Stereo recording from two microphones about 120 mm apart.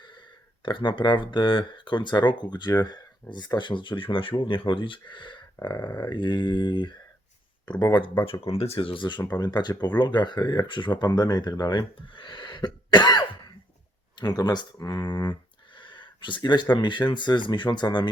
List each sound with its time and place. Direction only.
0.0 s speech: 40° left (ahead or behind)
8.5 s speech: 55° left (ahead or behind); by 11.9 s 30° left (ahead or behind)
11.9 s cough: 45° left (ahead or behind)
14.2 s speech: 35° left (ahead or behind)